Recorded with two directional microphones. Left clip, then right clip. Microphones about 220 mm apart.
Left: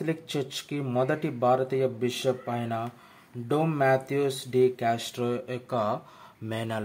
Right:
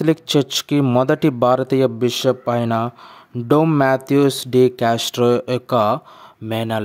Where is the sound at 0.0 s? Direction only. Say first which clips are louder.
Right 14 dB; 45° right (ahead or behind).